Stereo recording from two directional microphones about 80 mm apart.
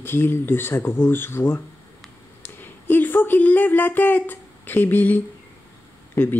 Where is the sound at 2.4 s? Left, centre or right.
Left.